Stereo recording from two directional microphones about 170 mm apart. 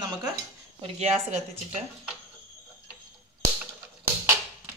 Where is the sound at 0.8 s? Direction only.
40° right (ahead or behind).